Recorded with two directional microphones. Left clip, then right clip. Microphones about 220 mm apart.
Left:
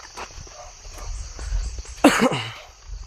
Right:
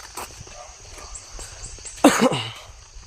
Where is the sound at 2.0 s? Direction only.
10° left (ahead or behind).